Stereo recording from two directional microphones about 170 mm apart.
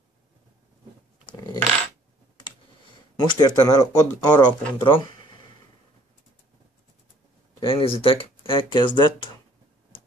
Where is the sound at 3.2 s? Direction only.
25° left (ahead or behind).